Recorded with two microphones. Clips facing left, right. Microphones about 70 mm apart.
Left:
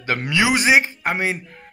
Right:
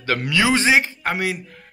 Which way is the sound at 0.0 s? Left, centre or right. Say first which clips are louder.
Even; left.